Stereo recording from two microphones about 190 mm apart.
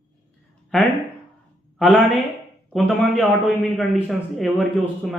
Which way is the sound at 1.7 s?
Centre (ahead or behind).